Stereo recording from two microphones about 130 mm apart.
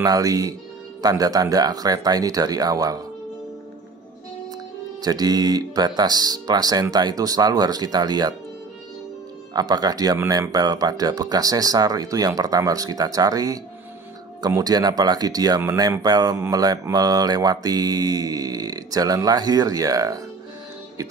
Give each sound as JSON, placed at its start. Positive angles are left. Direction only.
{"t": 0.0, "sound": "mantra", "side_deg": -30}
{"t": 5.0, "sound": "speech", "side_deg": -30}
{"t": 9.5, "sound": "mantra", "side_deg": -30}